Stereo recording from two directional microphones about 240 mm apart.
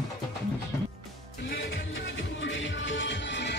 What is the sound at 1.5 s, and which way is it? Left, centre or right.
Music, left.